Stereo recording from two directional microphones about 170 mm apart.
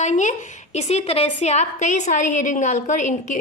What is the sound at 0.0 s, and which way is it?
A woman's voice, 45° left (ahead or behind).